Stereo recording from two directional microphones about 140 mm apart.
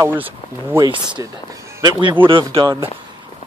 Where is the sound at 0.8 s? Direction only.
35° right (ahead or behind).